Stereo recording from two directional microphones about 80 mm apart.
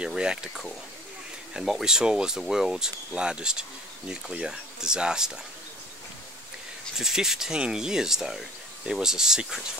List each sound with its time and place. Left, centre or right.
0.0 s speech: centre
7.0 s speech: centre